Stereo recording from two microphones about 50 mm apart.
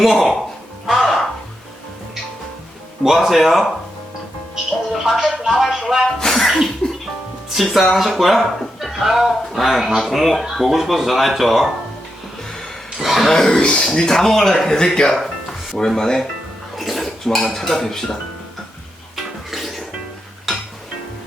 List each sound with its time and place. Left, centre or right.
0.0 s speech: centre
0.9 s music: centre
3.0 s speech: centre
4.9 s speech: centre
5.3 s music: centre
6.1 s speech: centre
7.5 s speech: centre
13.0 s speech: centre
13.2 s speech: centre
16.7 s dishes: centre
17.2 s speech: centre
19.1 s music: centre